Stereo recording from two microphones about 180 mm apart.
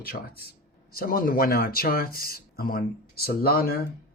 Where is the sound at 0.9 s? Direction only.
55° left (ahead or behind).